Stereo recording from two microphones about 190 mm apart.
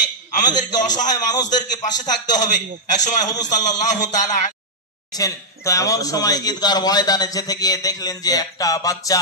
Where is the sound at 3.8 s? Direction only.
40° left (ahead or behind).